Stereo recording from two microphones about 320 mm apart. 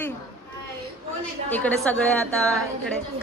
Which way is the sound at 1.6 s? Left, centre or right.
Centre.